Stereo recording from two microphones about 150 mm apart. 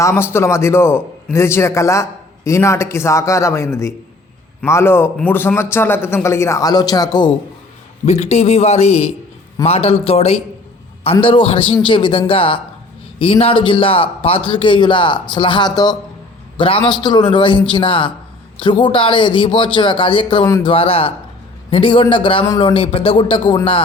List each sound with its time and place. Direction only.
0.0 s a man's voice: 15° left (ahead or behind)
8.0 s a man's voice: 45° left (ahead or behind)